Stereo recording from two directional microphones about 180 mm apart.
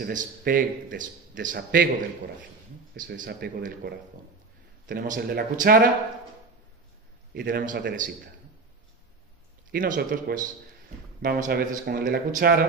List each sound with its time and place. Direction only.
0.0 s speech: 50° right (ahead or behind)
1.5 s a man's voice: 70° right (ahead or behind)
2.9 s speech: 60° right (ahead or behind)
7.3 s speech: 55° right (ahead or behind)
9.7 s speech: 50° right (ahead or behind)
11.2 s speech: 60° right (ahead or behind)